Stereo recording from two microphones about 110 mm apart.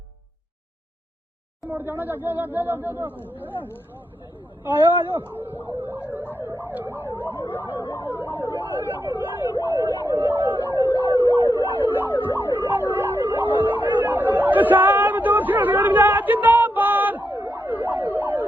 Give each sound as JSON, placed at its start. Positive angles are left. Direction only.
{"t": 1.7, "sound": "speech", "side_deg": -20}
{"t": 3.2, "sound": "speech", "side_deg": 15}
{"t": 4.6, "sound": "speech", "side_deg": -20}
{"t": 6.3, "sound": "emergency vehicle", "side_deg": -15}
{"t": 7.3, "sound": "emergency vehicle", "side_deg": 20}
{"t": 8.5, "sound": "emergency vehicle", "side_deg": -20}
{"t": 12.0, "sound": "emergency vehicle", "side_deg": 20}
{"t": 12.5, "sound": "emergency vehicle", "side_deg": -20}
{"t": 12.9, "sound": "ambulance", "side_deg": -20}